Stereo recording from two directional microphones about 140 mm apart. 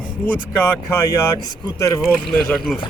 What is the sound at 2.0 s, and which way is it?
Speech, centre (ahead or behind).